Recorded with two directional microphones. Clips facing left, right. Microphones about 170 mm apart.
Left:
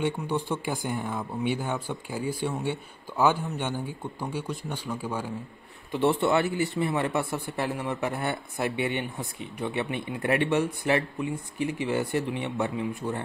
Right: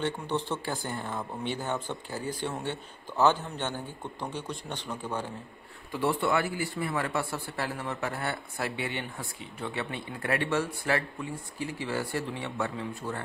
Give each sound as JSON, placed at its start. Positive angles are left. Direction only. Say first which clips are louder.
{"t": 0.0, "sound": "speech", "louder": "left 3 dB", "side_deg": 10}
{"t": 5.9, "sound": "a man's voice", "louder": "left 4 dB", "side_deg": 25}